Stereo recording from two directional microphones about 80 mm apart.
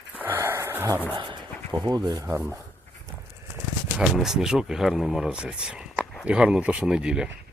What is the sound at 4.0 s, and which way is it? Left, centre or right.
Speech, centre.